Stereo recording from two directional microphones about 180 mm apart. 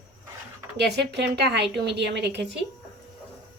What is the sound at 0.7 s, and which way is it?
A woman's voice, 70° right (ahead or behind).